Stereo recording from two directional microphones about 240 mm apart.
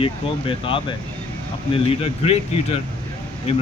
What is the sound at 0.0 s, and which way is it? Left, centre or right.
Speech, left.